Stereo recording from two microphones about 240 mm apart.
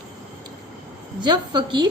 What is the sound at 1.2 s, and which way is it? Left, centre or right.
Speech, centre.